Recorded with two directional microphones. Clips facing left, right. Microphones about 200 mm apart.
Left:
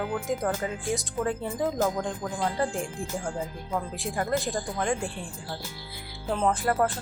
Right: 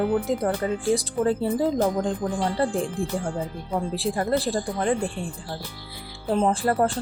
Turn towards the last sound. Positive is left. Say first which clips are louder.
# right 3 dB
turn(degrees=-30)  # may be behind; listen again after turning